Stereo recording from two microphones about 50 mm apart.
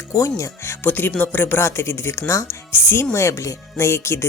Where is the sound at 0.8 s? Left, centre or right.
Left.